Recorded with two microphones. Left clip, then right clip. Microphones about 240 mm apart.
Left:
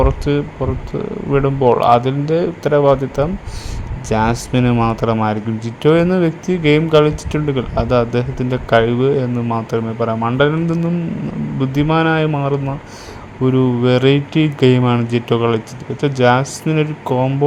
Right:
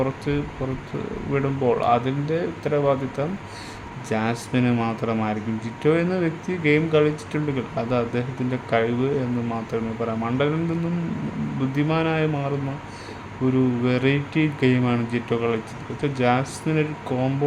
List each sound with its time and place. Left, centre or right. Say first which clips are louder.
0.0 s speech: left 8 dB; left
13.6 s speech: left 9 dB; left